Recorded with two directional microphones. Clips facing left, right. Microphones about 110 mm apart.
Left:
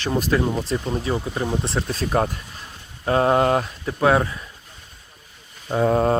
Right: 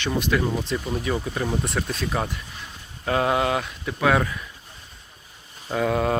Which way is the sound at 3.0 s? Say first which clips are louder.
Left 4 dB; 35° left (ahead or behind).